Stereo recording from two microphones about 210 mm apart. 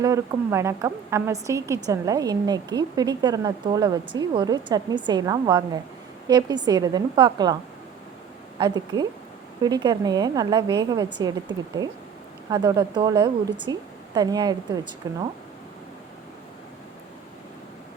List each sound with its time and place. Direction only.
0.0 s a woman's voice: 15° right (ahead or behind)
8.5 s a woman's voice: 20° right (ahead or behind)